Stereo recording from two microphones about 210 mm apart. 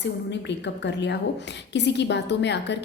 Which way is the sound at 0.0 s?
55° left (ahead or behind).